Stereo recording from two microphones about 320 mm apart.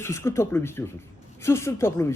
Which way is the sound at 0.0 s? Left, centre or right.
Centre.